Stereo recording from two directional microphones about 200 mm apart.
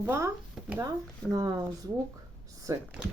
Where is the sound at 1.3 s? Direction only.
20° right (ahead or behind).